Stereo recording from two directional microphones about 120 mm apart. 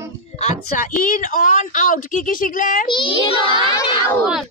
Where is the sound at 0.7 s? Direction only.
90° left.